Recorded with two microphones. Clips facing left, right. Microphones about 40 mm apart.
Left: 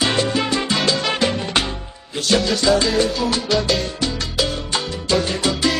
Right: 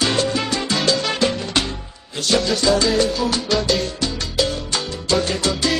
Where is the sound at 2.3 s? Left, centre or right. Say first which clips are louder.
Left 1 dB; centre.